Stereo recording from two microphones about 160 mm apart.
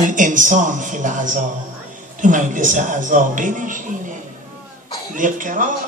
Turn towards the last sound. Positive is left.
turn(degrees=-55)  # may be behind; listen again after turning